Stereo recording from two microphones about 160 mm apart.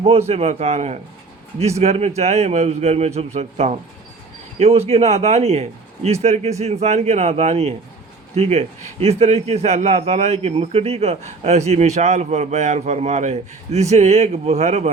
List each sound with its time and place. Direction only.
0.0 s a man's voice: 40° right (ahead or behind)